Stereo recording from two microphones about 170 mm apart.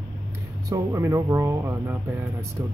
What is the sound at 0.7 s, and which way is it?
Speech, 15° right (ahead or behind).